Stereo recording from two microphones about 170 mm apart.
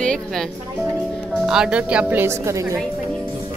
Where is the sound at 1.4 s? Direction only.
5° right (ahead or behind).